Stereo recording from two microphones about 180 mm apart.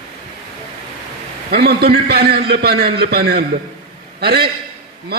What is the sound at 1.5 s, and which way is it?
A man's voice, 60° right (ahead or behind).